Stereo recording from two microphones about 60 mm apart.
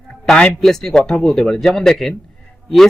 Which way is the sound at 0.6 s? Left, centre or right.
Centre.